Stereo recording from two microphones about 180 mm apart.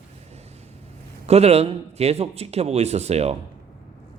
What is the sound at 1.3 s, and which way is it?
Speech, 35° right (ahead or behind).